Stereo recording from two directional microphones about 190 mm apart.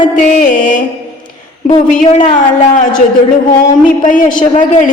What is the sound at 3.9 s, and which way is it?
A man's voice, 45° left (ahead or behind).